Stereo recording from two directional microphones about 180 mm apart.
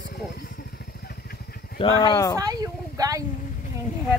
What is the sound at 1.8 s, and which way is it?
Speech, 25° left (ahead or behind).